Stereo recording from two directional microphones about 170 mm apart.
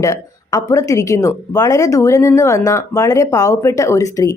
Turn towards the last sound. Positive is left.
turn(degrees=20)  # may be behind; listen again after turning